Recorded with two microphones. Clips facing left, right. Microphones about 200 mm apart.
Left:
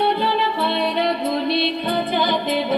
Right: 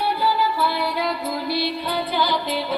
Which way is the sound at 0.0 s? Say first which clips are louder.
Left 2 dB; 25° left (ahead or behind).